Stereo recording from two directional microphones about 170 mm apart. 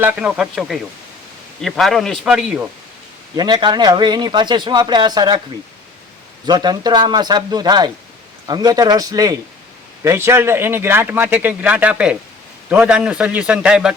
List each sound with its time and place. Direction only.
0.0 s a man's voice: 10° right (ahead or behind)
3.3 s speech: 25° right (ahead or behind)
6.4 s speech: 25° right (ahead or behind); by 13.9 s 5° right (ahead or behind)